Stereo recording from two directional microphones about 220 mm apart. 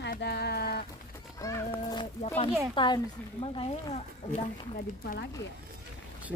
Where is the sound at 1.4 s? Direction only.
15° left (ahead or behind).